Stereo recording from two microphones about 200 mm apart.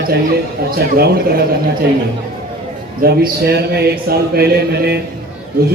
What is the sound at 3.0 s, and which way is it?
A man's voice, 50° right (ahead or behind).